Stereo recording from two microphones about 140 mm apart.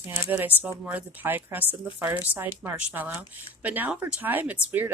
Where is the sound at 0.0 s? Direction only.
15° right (ahead or behind).